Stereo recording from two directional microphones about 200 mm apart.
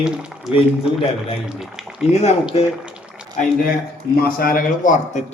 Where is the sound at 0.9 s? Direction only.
30° left (ahead or behind).